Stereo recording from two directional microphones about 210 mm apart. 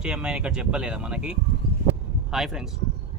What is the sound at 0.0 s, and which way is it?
Speech, 5° right (ahead or behind).